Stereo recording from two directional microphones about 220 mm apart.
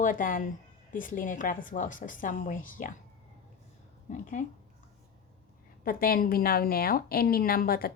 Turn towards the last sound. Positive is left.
turn(degrees=40)  # may be behind; listen again after turning